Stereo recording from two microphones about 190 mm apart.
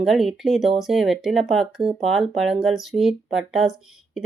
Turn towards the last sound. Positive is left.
turn(degrees=0)  # may be behind; listen again after turning